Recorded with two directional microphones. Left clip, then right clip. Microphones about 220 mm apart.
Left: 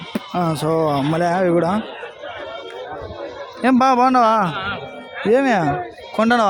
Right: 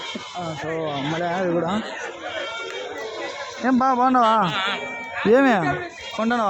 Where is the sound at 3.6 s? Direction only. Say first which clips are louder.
Left 5 dB; 25° left (ahead or behind).